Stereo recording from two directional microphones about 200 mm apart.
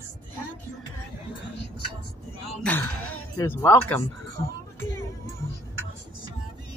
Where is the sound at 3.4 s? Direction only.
10° left (ahead or behind).